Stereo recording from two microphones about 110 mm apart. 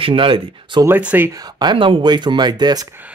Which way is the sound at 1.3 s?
40° right (ahead or behind).